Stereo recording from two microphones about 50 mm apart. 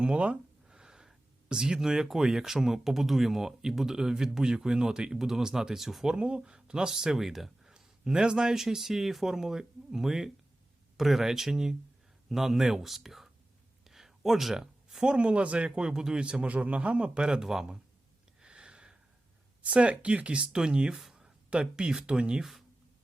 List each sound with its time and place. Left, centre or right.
0.0 s a man's voice: right; by 6.1 s centre
6.1 s a man's voice: centre
18.3 s a sound: centre
19.6 s speech: right
21.0 s a sound: centre
21.5 s a man's voice: centre